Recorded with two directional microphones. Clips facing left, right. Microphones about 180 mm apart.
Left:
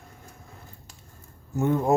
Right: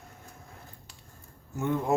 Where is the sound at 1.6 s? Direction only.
40° left (ahead or behind).